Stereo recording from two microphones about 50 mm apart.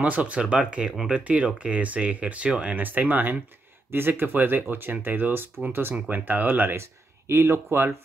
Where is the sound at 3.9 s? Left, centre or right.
Right.